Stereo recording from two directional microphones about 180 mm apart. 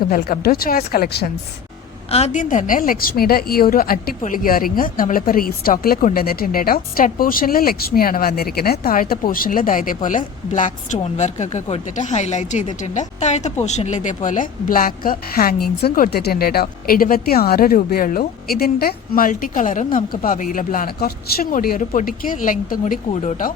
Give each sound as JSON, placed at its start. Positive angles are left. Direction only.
{"t": 0.1, "sound": "speech", "side_deg": 55}
{"t": 2.0, "sound": "a woman's voice", "side_deg": 35}